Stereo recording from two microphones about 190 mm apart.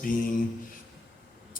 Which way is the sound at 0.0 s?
45° left (ahead or behind).